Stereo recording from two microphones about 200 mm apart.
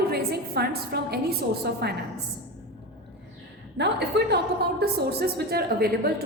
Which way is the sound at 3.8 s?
55° right (ahead or behind).